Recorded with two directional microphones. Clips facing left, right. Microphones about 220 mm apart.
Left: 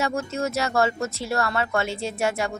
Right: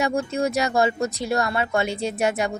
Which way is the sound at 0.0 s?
15° right (ahead or behind).